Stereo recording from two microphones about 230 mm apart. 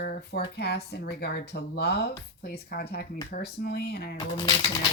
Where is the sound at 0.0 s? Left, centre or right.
Left.